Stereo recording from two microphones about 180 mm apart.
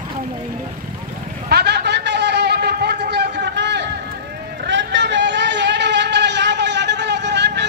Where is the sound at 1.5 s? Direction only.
65° right (ahead or behind).